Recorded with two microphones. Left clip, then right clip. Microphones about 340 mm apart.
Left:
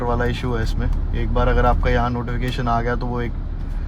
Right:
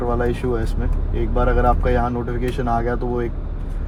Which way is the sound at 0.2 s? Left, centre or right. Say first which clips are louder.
Right 2 dB; left.